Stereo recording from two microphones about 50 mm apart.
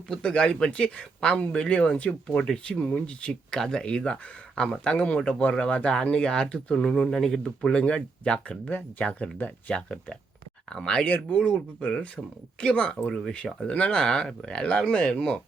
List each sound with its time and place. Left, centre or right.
0.3 s speech: centre
7.1 s speech: centre
8.6 s speech: left; by 11.0 s centre
11.0 s speech: left
11.9 s speech: centre